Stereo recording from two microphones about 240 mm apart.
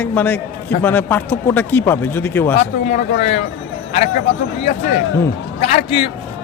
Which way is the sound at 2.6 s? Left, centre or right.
Left.